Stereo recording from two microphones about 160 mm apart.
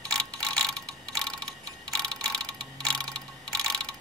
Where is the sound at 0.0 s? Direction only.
5° left (ahead or behind).